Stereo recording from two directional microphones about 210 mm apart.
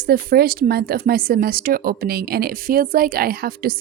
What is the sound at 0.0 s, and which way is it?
Speech, 45° right (ahead or behind).